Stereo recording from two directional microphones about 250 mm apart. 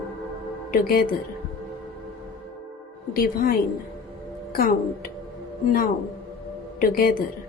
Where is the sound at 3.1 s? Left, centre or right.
Left.